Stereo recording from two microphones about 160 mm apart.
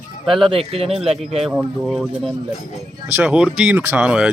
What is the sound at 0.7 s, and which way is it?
Speech, 40° right (ahead or behind).